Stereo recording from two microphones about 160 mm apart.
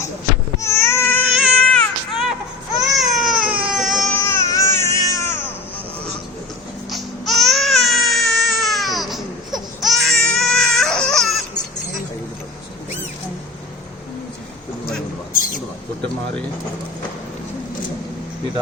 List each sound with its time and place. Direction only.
0.6 s baby cry: 15° left (ahead or behind)
1.3 s baby cry: centre (ahead or behind)
4.1 s baby cry: 15° left (ahead or behind)
6.9 s baby cry: centre (ahead or behind)
15.3 s a sound: 60° left (ahead or behind)